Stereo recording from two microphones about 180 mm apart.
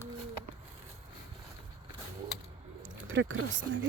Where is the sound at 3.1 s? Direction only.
90° right.